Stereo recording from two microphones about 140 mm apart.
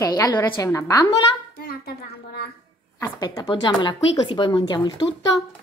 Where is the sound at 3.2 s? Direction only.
30° left (ahead or behind).